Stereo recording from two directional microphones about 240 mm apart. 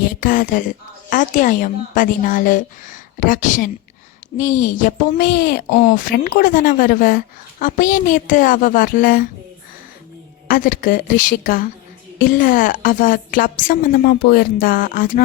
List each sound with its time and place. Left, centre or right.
0.0 s a woman's voice: left
10.5 s a woman's voice: left